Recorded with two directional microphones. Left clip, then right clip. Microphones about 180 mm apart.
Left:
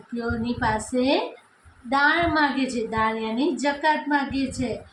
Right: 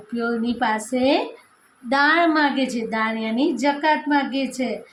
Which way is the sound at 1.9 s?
50° right (ahead or behind).